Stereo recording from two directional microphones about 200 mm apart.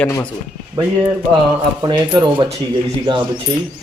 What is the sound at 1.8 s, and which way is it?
Speech, 20° right (ahead or behind).